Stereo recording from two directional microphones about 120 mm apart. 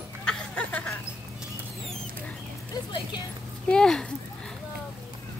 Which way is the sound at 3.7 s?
5° left (ahead or behind).